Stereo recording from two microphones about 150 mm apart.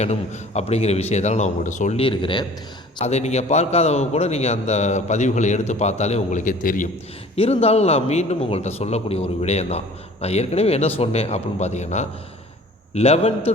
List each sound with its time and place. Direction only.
0.0 s a man's voice: 45° left (ahead or behind)
2.0 s speech: 35° left (ahead or behind)
3.0 s a man's voice: 45° left (ahead or behind); by 6.8 s 65° left (ahead or behind)
7.3 s a man's voice: 40° left (ahead or behind)